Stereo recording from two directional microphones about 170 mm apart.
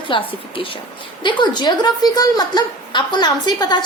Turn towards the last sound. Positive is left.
turn(degrees=25)  # may be behind; listen again after turning